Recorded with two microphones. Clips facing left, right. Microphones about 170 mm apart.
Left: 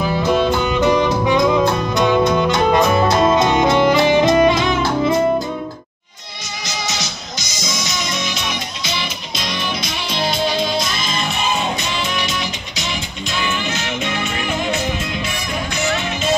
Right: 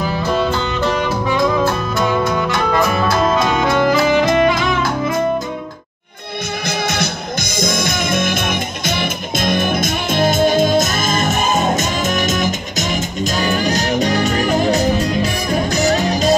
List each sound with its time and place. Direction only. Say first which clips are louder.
0.1 s music: left 3 dB; 15° left (ahead or behind)
6.9 s music: right 7 dB; 55° right (ahead or behind); by 16.3 s 40° right (ahead or behind)